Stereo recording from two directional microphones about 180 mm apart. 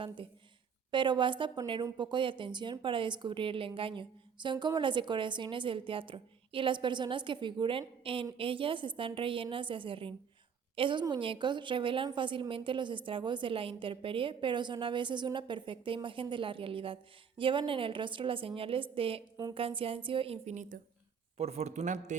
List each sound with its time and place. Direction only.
0.9 s a woman's voice: 25° right (ahead or behind); by 22.1 s 40° right (ahead or behind)